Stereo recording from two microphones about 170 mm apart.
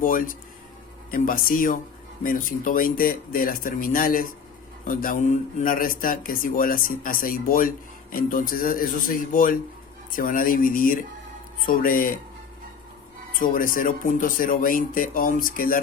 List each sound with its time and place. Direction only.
0.0 s speech: 55° left (ahead or behind)
13.4 s speech: 55° left (ahead or behind)